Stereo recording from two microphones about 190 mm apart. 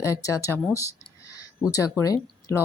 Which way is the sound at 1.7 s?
15° left (ahead or behind).